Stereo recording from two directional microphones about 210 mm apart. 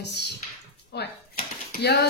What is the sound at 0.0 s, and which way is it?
Speech, 55° left (ahead or behind).